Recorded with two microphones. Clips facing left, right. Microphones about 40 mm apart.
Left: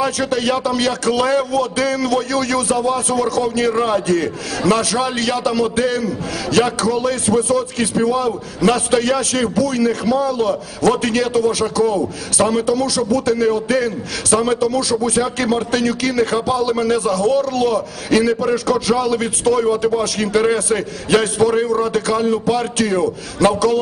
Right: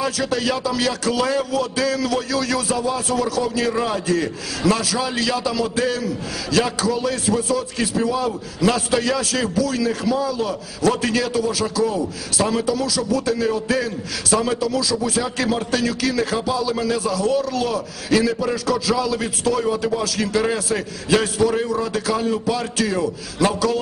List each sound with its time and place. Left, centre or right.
0.0 s a man's voice: left
4.1 s a man's voice: left
12.6 s a man's voice: left